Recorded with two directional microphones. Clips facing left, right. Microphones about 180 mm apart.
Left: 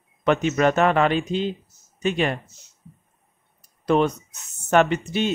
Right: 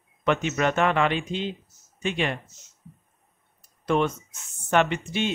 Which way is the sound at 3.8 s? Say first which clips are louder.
Left 4 dB; 35° left (ahead or behind).